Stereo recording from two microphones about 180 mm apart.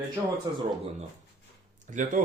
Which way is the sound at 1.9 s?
45° right (ahead or behind).